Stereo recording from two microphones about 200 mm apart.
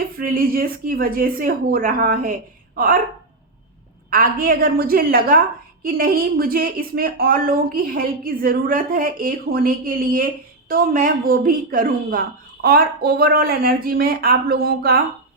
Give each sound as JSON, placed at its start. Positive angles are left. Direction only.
{"t": 0.2, "sound": "a woman's voice", "side_deg": -45}
{"t": 4.1, "sound": "a woman's voice", "side_deg": -45}